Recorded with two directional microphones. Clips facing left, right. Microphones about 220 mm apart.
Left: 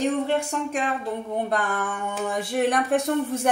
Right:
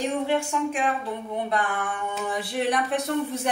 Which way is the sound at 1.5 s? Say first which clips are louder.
Left 1 dB; 40° left (ahead or behind).